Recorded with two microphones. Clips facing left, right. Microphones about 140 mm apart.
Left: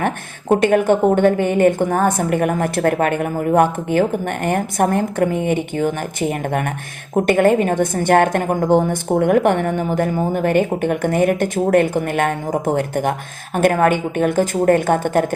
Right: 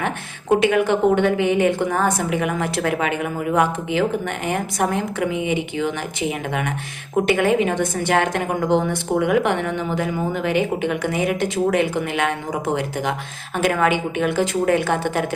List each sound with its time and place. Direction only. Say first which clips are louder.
0.6 s a woman's voice: left 4 dB; 45° left (ahead or behind)